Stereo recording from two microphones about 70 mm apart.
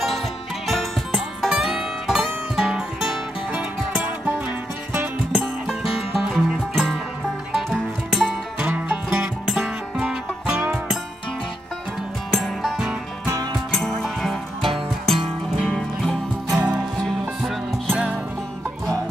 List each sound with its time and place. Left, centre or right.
0.7 s music: centre
5.3 s music: centre
8.5 s music: centre
9.1 s music: centre
12.3 s music: centre
16.5 s music: centre